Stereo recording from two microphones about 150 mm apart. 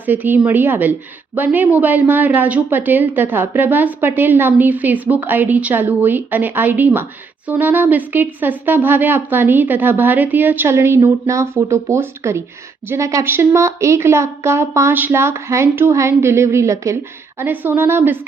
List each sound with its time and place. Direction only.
0.0 s a woman's voice: 10° right (ahead or behind)